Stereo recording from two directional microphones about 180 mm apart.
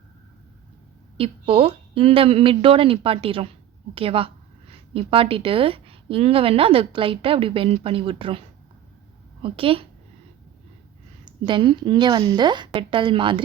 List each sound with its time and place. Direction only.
1.1 s a woman's voice: 30° right (ahead or behind)
11.3 s a woman's voice: 25° right (ahead or behind)